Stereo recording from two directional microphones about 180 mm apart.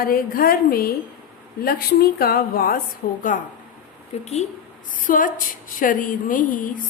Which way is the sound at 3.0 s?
45° left (ahead or behind).